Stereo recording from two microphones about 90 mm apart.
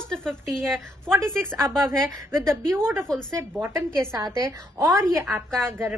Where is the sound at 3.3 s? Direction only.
35° right (ahead or behind).